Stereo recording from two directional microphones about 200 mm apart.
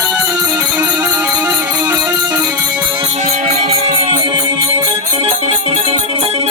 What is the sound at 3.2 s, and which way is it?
Music, 35° right (ahead or behind).